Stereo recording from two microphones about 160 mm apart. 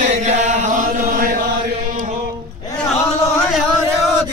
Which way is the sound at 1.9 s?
50° right (ahead or behind).